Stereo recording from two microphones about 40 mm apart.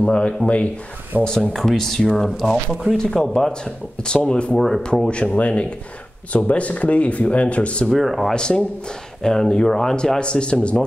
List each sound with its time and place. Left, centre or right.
0.0 s speech: left
1.1 s speech: right
1.5 s speech: centre
4.6 s speech: centre
5.0 s speech: left
7.9 s speech: centre
8.3 s speech: centre